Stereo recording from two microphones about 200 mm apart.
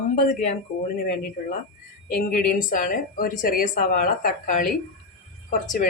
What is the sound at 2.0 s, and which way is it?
A woman's voice, 45° left (ahead or behind).